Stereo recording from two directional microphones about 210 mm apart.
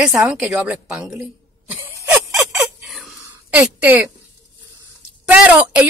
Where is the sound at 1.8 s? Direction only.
10° right (ahead or behind).